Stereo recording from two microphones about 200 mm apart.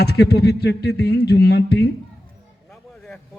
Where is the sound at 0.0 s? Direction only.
55° left (ahead or behind).